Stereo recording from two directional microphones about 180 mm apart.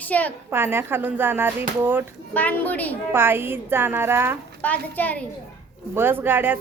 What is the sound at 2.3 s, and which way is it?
Speech, 10° left (ahead or behind).